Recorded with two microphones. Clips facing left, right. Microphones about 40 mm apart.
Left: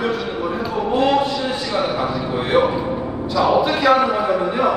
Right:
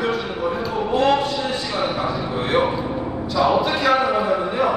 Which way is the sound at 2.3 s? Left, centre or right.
Centre.